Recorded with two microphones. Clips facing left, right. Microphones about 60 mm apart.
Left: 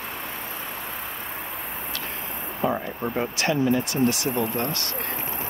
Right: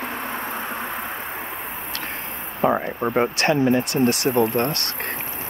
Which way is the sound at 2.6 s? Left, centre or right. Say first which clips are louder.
Right 5 dB; right.